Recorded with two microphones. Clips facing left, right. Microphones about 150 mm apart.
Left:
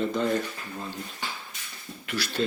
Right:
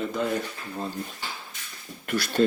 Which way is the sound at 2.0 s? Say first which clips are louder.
Right 6 dB; 50° right (ahead or behind).